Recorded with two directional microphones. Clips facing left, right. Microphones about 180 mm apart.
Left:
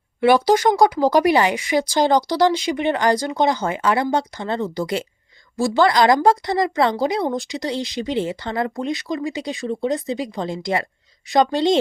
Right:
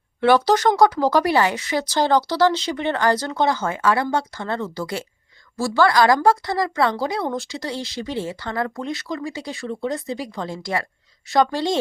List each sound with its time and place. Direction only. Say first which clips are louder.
0.2 s speech: left 1 dB; 10° left (ahead or behind)